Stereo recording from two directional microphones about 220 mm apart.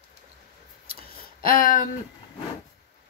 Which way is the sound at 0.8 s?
40° left (ahead or behind).